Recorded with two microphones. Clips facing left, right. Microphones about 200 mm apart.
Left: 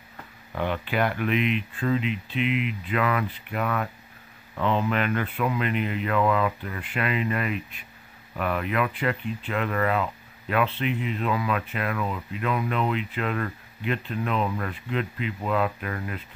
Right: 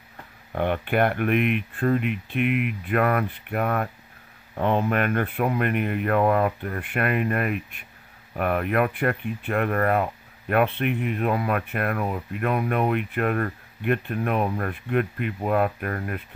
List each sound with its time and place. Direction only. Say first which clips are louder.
0.6 s speech: right 4 dB; 55° right (ahead or behind)